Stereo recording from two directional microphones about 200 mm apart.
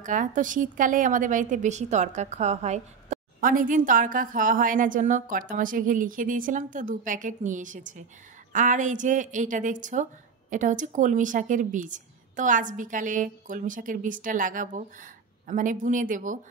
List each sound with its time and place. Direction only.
0.0 s a woman's voice: 40° right (ahead or behind)